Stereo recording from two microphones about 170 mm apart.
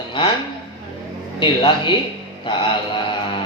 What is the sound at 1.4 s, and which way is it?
Speech, 30° left (ahead or behind).